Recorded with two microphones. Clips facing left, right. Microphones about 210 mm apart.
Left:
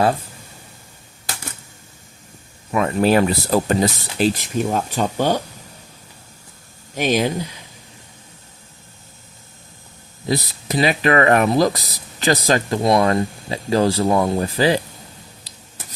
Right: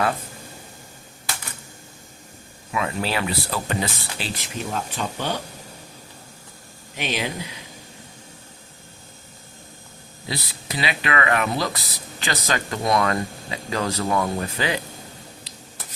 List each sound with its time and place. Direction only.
2.7 s speech: 45° left (ahead or behind)
6.9 s speech: 45° left (ahead or behind)
10.2 s speech: 45° left (ahead or behind)